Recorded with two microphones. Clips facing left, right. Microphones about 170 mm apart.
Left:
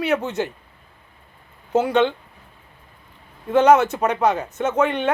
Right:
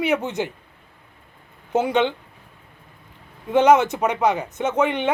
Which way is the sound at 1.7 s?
15° right (ahead or behind).